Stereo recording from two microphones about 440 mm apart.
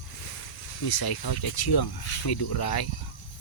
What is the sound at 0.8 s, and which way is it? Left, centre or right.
Speech, left.